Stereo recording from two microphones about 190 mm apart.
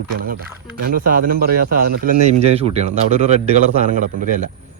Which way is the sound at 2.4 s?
30° right (ahead or behind).